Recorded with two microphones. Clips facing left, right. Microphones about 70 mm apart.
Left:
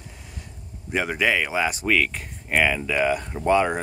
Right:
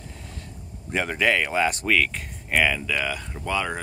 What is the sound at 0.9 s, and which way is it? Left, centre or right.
Speech, centre.